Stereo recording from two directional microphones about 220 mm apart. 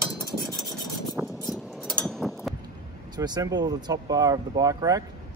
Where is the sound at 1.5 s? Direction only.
Centre (ahead or behind).